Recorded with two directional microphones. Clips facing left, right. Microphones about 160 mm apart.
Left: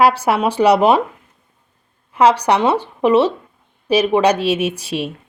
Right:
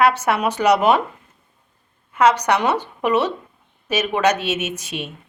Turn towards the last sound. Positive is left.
turn(degrees=35)  # may be behind; listen again after turning